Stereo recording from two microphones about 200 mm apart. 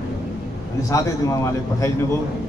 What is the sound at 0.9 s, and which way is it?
A man's voice, 15° left (ahead or behind).